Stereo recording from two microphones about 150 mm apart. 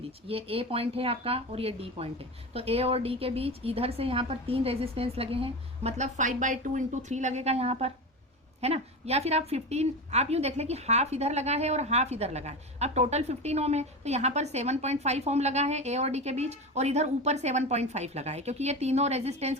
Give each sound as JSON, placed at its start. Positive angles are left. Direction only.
{"t": 0.3, "sound": "a woman's voice", "side_deg": -40}